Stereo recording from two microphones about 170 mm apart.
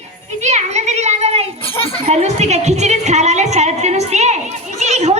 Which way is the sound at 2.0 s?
40° right (ahead or behind).